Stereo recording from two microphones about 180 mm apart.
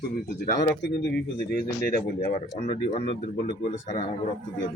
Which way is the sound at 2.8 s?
40° left (ahead or behind).